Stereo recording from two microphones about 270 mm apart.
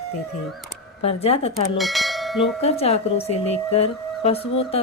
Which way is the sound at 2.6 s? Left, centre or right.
Left.